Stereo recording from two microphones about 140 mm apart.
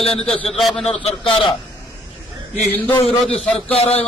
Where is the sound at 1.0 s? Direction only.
35° left (ahead or behind).